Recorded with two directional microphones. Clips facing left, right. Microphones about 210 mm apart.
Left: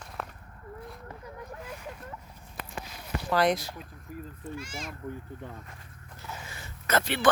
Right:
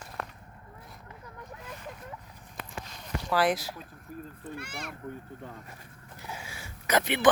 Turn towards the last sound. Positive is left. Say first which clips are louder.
# right 1 dB
turn(degrees=-20)  # may be behind; listen again after turning